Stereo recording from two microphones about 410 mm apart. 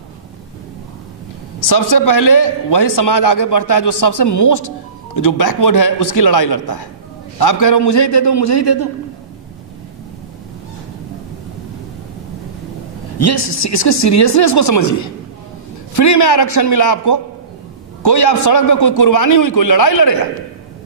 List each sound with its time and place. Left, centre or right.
1.6 s speech: left
3.3 s a man's voice: left
5.1 s a man's voice: left
7.8 s a man's voice: left
8.1 s speech: left
13.2 s a man's voice: left
18.0 s speech: left